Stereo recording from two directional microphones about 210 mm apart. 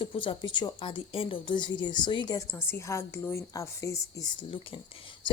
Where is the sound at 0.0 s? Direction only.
25° left (ahead or behind).